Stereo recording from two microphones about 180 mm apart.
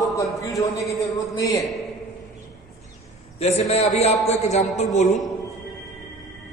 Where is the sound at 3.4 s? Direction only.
35° left (ahead or behind).